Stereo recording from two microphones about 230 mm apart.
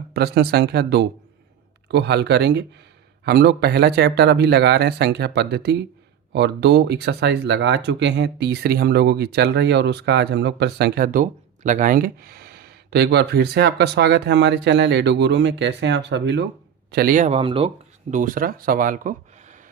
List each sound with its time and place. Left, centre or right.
0.1 s speech: right
18.1 s speech: right